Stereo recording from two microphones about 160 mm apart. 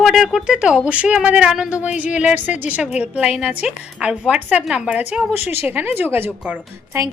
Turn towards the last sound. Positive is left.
turn(degrees=-15)  # may be behind; listen again after turning